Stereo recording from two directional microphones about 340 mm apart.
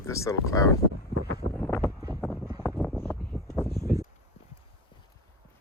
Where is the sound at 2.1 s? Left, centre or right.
Centre.